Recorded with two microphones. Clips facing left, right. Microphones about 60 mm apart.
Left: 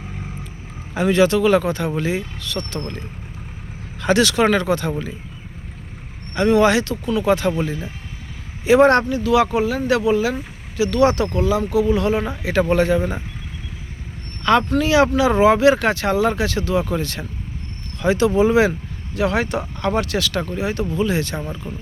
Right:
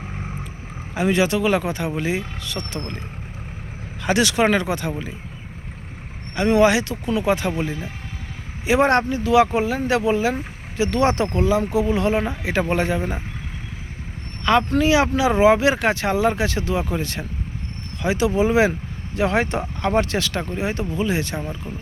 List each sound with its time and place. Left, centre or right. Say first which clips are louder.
0.9 s speech: left 3 dB; centre
4.0 s speech: left 2 dB; centre
6.3 s speech: left 1 dB; centre
14.7 s speech: left 2 dB; centre